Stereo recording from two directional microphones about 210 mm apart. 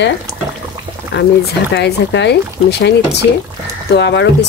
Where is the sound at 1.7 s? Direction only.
55° left (ahead or behind).